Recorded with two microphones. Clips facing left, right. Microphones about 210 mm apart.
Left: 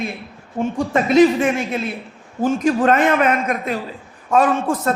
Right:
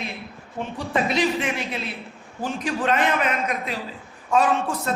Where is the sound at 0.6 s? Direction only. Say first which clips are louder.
Left 6 dB; 45° left (ahead or behind).